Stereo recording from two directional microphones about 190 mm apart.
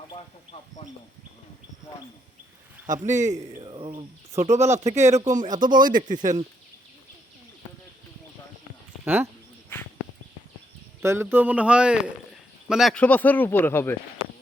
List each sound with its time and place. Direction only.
0.1 s speech: 30° left (ahead or behind)
3.1 s speech: 40° right (ahead or behind)
3.3 s speech: 20° right (ahead or behind)
4.3 s a man's voice: 15° right (ahead or behind)
4.5 s speech: 35° right (ahead or behind)
9.0 s a man's voice: 10° right (ahead or behind)
11.0 s a man's voice: 15° right (ahead or behind); by 13.9 s 10° left (ahead or behind)